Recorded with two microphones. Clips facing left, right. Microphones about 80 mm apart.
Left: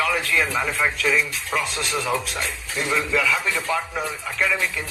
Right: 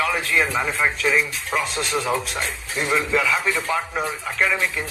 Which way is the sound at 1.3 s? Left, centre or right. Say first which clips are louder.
Right 1 dB; right.